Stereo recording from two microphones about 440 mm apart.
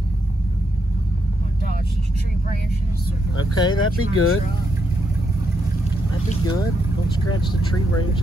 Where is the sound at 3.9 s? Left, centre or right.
Left.